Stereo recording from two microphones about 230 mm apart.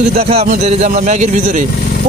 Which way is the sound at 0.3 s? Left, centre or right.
Right.